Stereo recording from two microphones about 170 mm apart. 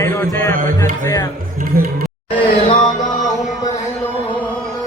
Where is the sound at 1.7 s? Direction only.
60° right (ahead or behind).